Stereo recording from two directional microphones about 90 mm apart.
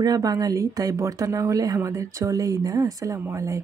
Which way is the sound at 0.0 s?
45° right (ahead or behind).